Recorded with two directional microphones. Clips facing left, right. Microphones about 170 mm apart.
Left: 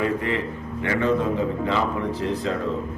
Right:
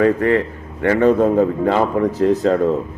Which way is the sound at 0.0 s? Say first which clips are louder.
Right 9 dB; 50° right (ahead or behind).